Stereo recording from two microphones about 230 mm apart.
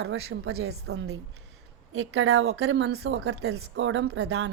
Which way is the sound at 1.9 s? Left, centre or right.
Right.